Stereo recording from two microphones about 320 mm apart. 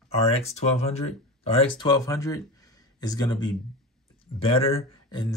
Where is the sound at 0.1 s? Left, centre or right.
Centre.